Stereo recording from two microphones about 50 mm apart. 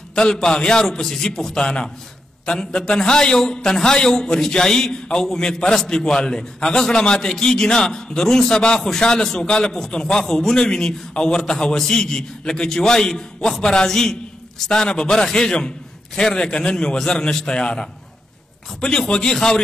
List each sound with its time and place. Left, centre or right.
0.1 s a man's voice: centre